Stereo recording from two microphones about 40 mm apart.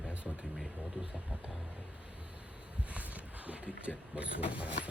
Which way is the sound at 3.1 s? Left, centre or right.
Right.